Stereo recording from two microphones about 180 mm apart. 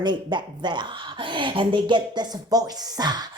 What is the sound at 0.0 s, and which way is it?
A woman's voice, 25° right (ahead or behind).